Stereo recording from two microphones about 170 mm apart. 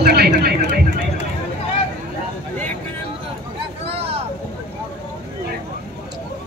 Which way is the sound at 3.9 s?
35° right (ahead or behind).